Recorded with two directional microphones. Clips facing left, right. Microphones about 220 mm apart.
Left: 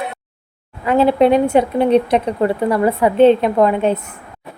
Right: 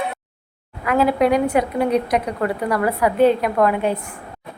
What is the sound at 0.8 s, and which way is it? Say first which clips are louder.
Speech: left 4 dB; 25° left (ahead or behind).